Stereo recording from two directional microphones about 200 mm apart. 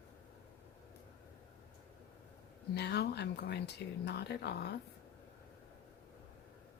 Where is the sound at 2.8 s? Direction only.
55° left (ahead or behind).